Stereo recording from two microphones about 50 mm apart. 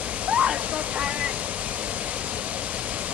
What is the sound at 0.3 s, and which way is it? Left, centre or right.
Waterfall, right.